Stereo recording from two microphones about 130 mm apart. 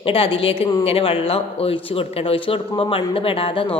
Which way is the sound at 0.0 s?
45° left (ahead or behind).